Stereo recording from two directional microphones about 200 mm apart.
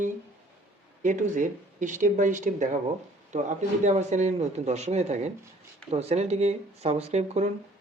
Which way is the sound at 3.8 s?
35° right (ahead or behind).